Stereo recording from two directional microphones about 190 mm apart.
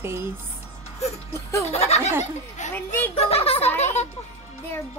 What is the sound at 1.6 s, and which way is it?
Speech, 35° left (ahead or behind).